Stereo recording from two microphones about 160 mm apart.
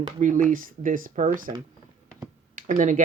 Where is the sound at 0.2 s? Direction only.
55° right (ahead or behind).